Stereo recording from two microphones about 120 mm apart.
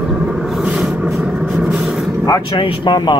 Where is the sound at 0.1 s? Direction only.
10° right (ahead or behind).